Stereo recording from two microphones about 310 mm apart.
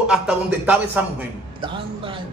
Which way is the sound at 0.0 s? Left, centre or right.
Centre.